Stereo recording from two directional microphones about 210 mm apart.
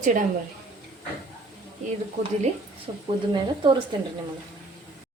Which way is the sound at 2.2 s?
35° right (ahead or behind).